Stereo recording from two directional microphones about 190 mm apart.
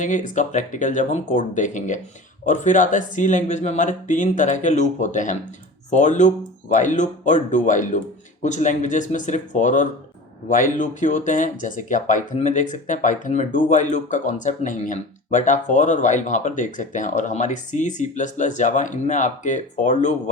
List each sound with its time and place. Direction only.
0.0 s speech: 40° left (ahead or behind)